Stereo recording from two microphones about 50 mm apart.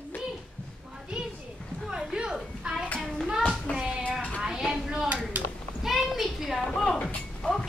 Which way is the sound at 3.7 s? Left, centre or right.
Left.